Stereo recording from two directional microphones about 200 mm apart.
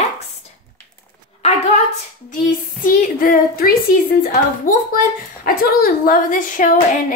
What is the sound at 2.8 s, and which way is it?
A woman's voice, 45° left (ahead or behind).